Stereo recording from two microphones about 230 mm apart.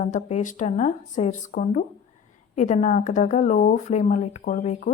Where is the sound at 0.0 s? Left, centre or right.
Left.